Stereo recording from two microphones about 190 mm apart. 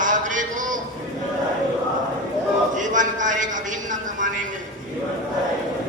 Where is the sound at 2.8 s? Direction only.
40° right (ahead or behind).